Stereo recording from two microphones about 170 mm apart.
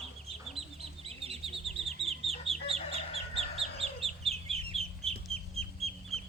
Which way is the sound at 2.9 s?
35° left (ahead or behind).